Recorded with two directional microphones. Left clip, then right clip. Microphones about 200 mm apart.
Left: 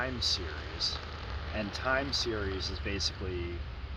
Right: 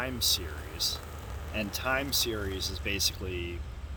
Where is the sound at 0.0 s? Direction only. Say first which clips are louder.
Right 2 dB; 40° right (ahead or behind).